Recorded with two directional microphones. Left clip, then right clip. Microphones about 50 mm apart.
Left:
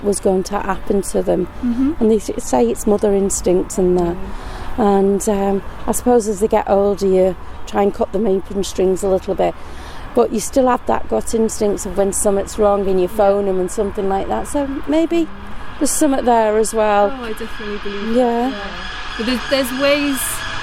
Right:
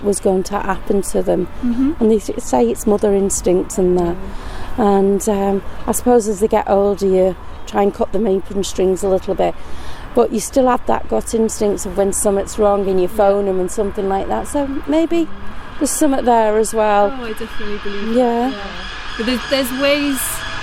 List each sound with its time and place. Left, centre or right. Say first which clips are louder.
0.0 s speech: even; centre
19.2 s speech: even; centre